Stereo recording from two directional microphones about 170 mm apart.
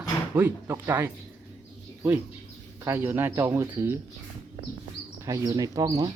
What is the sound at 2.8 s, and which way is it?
Speech, 15° right (ahead or behind).